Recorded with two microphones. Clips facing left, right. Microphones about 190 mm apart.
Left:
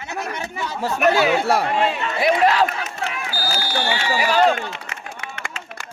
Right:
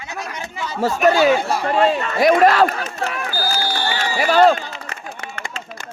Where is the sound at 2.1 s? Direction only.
45° right (ahead or behind).